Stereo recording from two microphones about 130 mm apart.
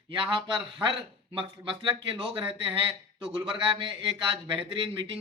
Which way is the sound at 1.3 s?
40° right (ahead or behind).